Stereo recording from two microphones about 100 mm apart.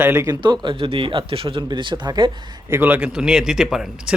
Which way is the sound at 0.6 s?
60° right (ahead or behind).